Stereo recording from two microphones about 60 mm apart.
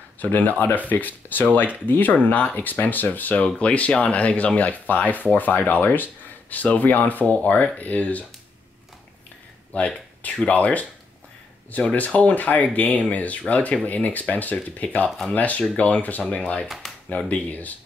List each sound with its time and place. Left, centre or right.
0.2 s speech: left
9.8 s speech: left
16.6 s speech: centre
17.3 s speech: left